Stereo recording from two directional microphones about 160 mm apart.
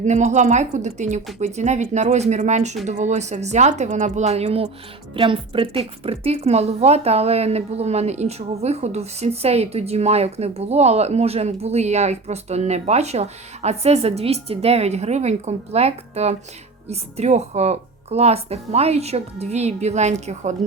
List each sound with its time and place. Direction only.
0.0 s a woman's voice: 50° right (ahead or behind)